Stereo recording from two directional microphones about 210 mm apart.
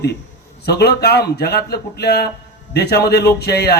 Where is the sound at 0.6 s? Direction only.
50° left (ahead or behind).